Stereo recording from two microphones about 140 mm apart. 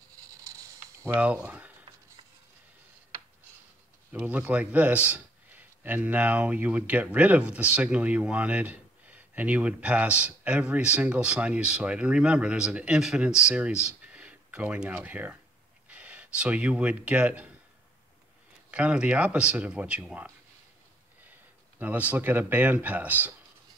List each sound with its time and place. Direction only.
0.4 s a sound: 20° right (ahead or behind)
1.1 s a man's voice: 10° right (ahead or behind)
4.1 s a man's voice: 10° right (ahead or behind)
18.7 s a man's voice: 10° right (ahead or behind)